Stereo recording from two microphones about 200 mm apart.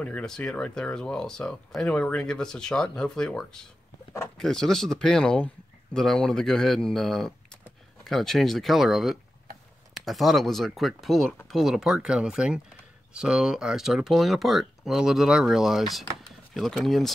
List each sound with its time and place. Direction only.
0.0 s speech: 5° left (ahead or behind)